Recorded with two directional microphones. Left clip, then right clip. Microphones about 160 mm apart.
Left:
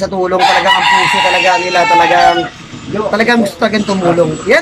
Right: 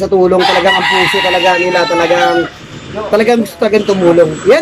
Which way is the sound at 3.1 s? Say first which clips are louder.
Right 1 dB; 15° right (ahead or behind).